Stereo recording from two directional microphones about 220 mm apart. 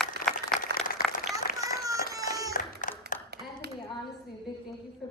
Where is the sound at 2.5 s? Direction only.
35° left (ahead or behind).